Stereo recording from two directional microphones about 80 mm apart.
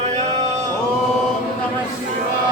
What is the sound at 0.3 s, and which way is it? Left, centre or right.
Male singing, right.